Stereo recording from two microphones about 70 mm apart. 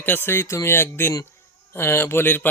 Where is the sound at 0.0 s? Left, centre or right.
Left.